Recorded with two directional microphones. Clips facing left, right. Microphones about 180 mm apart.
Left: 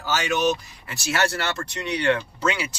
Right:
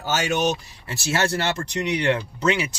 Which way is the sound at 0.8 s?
25° right (ahead or behind).